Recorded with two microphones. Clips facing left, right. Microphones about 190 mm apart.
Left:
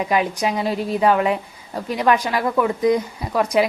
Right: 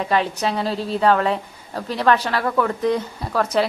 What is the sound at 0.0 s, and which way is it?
A woman's voice, 10° left (ahead or behind).